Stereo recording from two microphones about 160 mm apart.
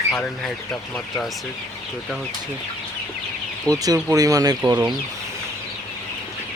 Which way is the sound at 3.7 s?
20° right (ahead or behind).